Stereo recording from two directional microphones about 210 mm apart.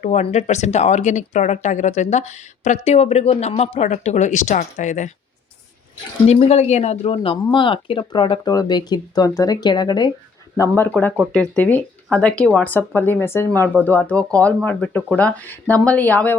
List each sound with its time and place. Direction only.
0.0 s speech: 30° left (ahead or behind)
6.2 s speech: 30° left (ahead or behind); by 16.3 s 5° left (ahead or behind)